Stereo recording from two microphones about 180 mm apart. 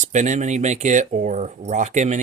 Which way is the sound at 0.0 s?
40° right (ahead or behind).